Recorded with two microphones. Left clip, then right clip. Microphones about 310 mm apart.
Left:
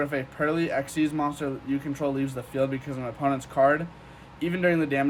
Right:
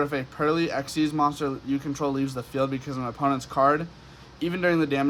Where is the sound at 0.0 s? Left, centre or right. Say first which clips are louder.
Right 1 dB; centre.